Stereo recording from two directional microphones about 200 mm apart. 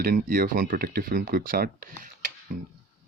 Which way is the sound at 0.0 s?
45° right (ahead or behind).